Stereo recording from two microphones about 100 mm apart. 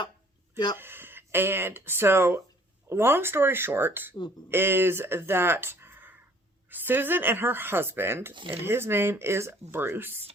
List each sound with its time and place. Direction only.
0.8 s speech: 20° right (ahead or behind)
8.3 s speech: 55° right (ahead or behind)
8.6 s speech: 25° right (ahead or behind)